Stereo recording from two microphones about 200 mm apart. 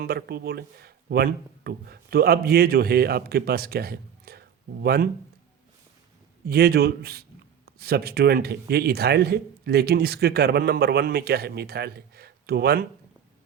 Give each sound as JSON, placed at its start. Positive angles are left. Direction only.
{"t": 0.0, "sound": "speech", "side_deg": -50}
{"t": 6.4, "sound": "a man's voice", "side_deg": -50}